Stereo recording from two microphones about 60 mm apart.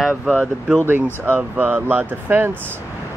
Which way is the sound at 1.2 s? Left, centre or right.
Right.